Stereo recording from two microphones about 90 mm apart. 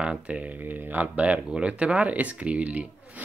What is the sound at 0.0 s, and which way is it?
Speech, 10° right (ahead or behind).